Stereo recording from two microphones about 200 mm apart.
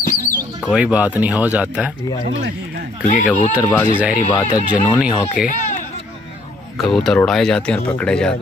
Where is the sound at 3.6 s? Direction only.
10° left (ahead or behind).